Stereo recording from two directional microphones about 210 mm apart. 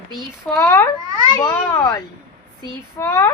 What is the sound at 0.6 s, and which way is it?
A woman's voice, 15° left (ahead or behind).